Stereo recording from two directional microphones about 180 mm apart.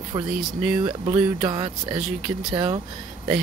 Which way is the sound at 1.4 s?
25° right (ahead or behind).